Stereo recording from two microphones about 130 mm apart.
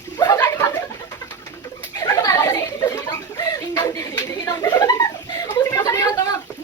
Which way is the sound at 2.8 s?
25° left (ahead or behind).